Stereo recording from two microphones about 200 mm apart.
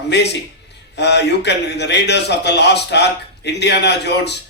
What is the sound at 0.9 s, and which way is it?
A man's voice, 60° left (ahead or behind).